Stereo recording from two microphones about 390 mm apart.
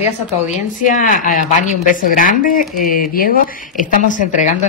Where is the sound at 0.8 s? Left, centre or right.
Centre.